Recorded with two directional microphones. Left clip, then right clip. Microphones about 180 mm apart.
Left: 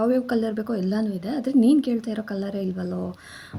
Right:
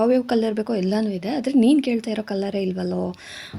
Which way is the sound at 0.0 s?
15° right (ahead or behind).